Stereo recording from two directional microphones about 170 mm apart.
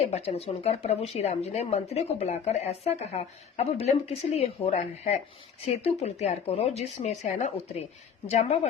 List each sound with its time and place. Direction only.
0.0 s speech: 40° left (ahead or behind)